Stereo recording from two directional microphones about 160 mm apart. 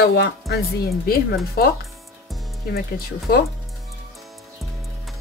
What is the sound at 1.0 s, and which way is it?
Speech, 70° left (ahead or behind).